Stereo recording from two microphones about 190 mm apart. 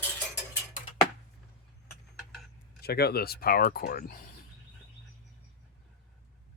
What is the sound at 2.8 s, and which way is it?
Speech, 55° left (ahead or behind).